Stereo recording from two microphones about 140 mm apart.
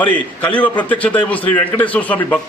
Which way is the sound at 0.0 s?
10° left (ahead or behind).